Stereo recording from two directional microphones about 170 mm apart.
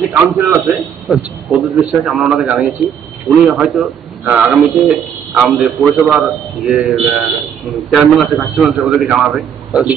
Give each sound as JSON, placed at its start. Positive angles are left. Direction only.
{"t": 0.1, "sound": "a man's voice", "side_deg": 0}